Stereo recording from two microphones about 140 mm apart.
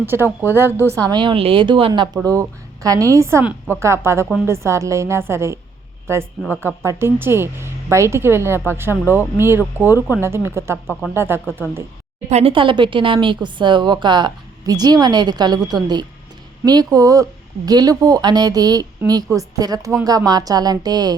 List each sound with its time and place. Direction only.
0.0 s a woman's voice: 15° right (ahead or behind)
1.0 s a woman's voice: 35° right (ahead or behind)
2.2 s a woman's voice: 25° right (ahead or behind)
12.3 s a woman's voice: 45° right (ahead or behind); by 21.2 s 30° right (ahead or behind)